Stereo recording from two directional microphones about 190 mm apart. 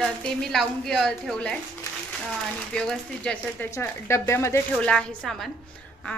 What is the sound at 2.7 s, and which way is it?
Speech, 5° left (ahead or behind).